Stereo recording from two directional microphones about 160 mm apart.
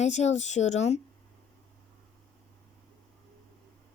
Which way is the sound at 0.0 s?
45° left (ahead or behind).